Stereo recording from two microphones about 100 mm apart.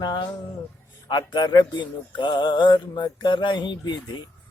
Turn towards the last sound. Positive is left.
turn(degrees=50)  # may be behind; listen again after turning